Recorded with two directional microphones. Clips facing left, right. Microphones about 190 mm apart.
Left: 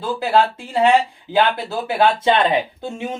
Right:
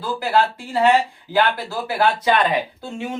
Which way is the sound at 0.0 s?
25° left (ahead or behind).